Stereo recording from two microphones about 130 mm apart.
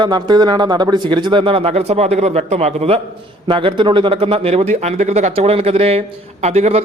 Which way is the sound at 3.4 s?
40° right (ahead or behind).